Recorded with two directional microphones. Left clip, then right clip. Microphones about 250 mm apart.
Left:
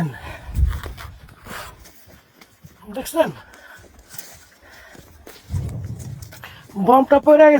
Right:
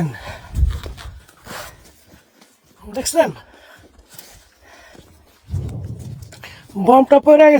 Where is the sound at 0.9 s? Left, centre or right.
Left.